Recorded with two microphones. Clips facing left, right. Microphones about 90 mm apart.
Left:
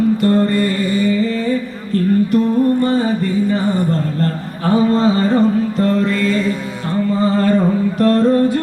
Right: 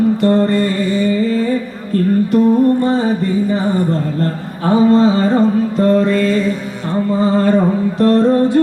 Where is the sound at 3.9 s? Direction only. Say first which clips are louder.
Right 1 dB; 20° right (ahead or behind).